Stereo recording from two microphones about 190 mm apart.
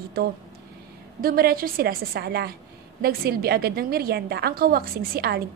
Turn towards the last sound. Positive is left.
turn(degrees=-55)  # may be behind; listen again after turning